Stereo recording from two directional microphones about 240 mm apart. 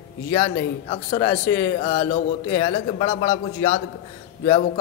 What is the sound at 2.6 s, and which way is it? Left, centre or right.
A man's voice, centre.